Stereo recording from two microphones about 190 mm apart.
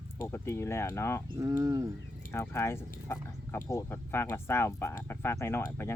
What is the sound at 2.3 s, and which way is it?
Speech, 15° left (ahead or behind).